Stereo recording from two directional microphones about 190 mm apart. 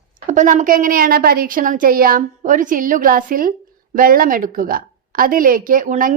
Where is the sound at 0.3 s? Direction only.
40° right (ahead or behind).